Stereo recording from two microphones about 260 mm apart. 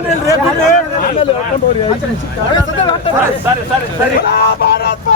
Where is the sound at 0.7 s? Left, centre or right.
Left.